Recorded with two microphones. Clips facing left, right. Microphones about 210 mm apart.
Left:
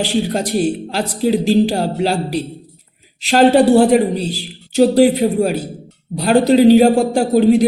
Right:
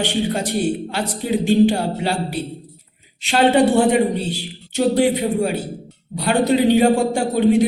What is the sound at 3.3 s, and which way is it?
A man's voice, 40° left (ahead or behind).